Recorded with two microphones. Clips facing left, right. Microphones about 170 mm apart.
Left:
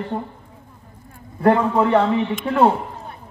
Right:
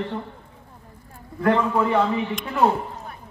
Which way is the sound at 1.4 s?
30° left (ahead or behind).